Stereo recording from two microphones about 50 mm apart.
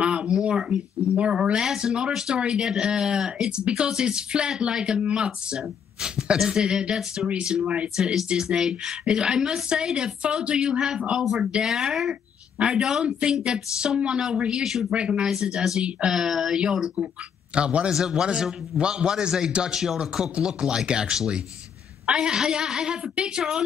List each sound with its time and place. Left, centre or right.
0.0 s a sound: right
1.3 s speech: centre
12.5 s speech: centre
14.9 s speech: right
17.9 s speech: centre